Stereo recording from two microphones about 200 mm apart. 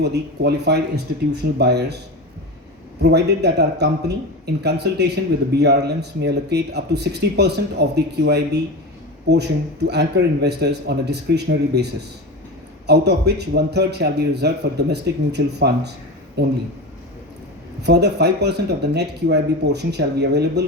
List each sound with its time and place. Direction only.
0.0 s speech: 55° right (ahead or behind)
3.0 s speech: 55° right (ahead or behind)
12.9 s speech: 55° right (ahead or behind)
17.8 s speech: 55° right (ahead or behind)